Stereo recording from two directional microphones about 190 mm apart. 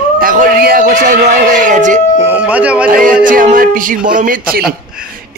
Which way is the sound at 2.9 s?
45° right (ahead or behind).